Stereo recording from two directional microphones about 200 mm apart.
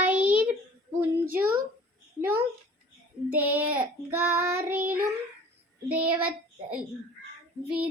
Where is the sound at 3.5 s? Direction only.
10° right (ahead or behind).